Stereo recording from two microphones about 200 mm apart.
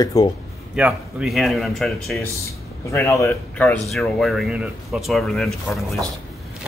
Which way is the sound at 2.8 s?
15° left (ahead or behind).